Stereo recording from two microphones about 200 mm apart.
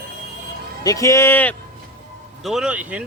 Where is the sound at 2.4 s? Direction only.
Centre (ahead or behind).